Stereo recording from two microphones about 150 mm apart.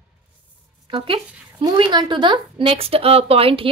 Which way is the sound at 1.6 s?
30° right (ahead or behind).